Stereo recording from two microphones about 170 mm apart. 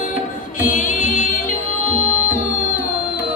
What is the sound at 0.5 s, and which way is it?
Music, 50° left (ahead or behind).